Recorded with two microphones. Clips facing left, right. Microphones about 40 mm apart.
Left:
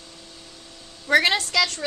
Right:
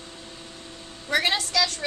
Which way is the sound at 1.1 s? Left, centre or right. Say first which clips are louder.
Left 5 dB; left.